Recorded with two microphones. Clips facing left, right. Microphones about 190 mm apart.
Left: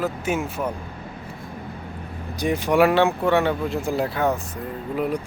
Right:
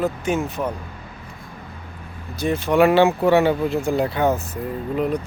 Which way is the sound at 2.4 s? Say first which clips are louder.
Right 1 dB; 15° left (ahead or behind).